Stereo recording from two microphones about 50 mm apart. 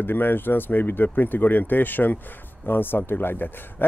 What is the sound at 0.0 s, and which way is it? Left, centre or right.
Speech, left.